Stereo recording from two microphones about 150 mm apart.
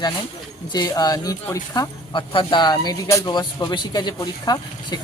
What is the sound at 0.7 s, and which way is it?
Speech, 25° left (ahead or behind).